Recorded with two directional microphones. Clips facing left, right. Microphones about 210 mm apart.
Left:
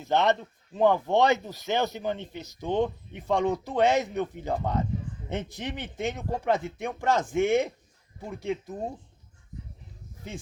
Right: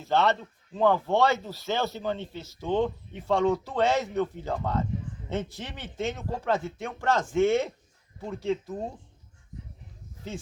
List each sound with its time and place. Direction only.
0.0 s speech: 15° left (ahead or behind)